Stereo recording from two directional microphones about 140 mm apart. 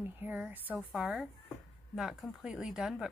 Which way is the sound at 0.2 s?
15° right (ahead or behind).